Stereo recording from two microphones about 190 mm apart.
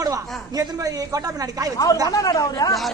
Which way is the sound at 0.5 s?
20° right (ahead or behind).